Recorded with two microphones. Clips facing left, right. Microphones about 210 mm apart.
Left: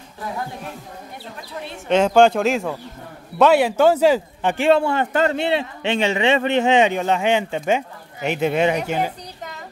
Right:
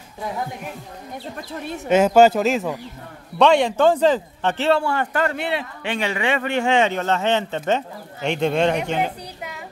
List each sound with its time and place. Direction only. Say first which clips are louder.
1.9 s a man's voice: right 1 dB; 5° right (ahead or behind)